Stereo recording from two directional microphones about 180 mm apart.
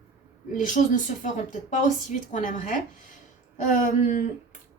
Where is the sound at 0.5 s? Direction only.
45° left (ahead or behind).